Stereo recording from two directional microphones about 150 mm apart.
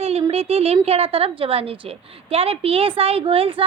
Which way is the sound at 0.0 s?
40° right (ahead or behind).